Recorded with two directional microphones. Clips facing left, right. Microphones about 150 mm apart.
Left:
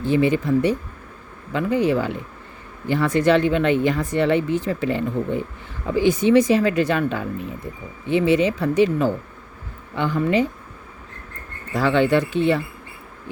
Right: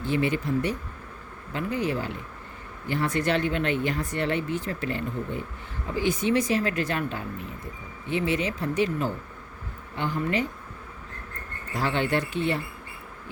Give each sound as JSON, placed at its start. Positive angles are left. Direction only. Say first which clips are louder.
{"t": 0.0, "sound": "speech", "louder": "left 7 dB", "side_deg": 90}
{"t": 11.7, "sound": "speech", "louder": "left 8 dB", "side_deg": 90}